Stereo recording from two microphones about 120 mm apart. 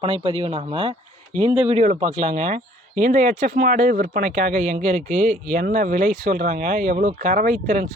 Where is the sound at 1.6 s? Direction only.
75° right (ahead or behind).